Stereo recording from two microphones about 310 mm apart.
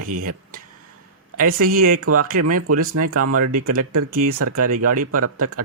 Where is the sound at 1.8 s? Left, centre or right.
Right.